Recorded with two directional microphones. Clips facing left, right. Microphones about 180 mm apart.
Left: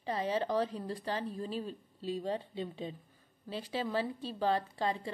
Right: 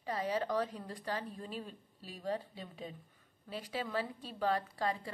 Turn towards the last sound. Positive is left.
turn(degrees=25)  # may be behind; listen again after turning